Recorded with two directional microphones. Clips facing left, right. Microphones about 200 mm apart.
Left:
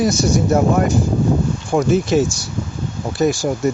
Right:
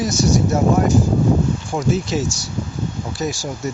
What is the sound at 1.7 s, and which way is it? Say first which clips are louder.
Speech: left 7 dB; 55° left (ahead or behind).